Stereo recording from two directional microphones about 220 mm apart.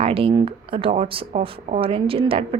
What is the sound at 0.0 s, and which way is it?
A woman's voice, 25° right (ahead or behind).